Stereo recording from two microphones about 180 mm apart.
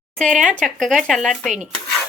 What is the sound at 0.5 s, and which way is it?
Speech, centre (ahead or behind).